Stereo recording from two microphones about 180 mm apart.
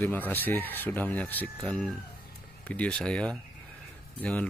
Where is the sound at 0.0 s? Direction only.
10° left (ahead or behind).